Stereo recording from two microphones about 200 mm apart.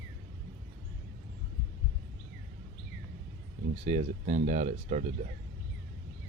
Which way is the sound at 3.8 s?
35° right (ahead or behind).